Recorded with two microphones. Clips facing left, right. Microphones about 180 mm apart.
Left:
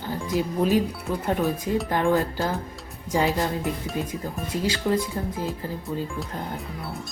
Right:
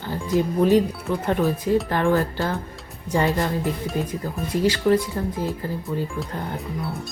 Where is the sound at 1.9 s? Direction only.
15° left (ahead or behind).